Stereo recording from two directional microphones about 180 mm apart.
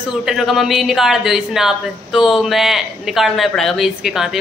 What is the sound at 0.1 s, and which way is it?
Speech, centre (ahead or behind).